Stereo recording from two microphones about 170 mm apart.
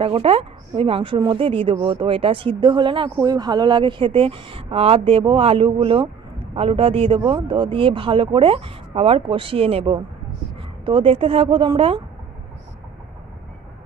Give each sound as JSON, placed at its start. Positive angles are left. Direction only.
{"t": 0.0, "sound": "speech", "side_deg": -35}